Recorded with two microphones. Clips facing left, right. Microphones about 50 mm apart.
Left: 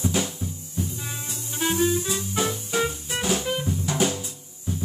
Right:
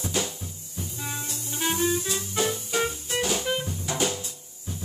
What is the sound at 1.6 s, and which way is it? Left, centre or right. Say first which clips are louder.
Music: left 3 dB; centre.